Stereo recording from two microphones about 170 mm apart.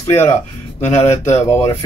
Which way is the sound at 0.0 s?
15° left (ahead or behind).